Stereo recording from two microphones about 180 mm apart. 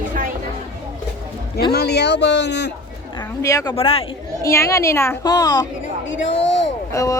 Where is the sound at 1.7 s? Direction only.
65° left (ahead or behind).